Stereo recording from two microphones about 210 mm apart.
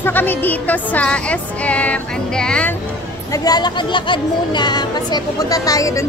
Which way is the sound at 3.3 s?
20° left (ahead or behind).